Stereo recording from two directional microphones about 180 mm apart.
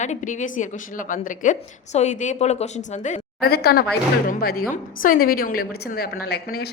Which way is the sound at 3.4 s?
60° left (ahead or behind).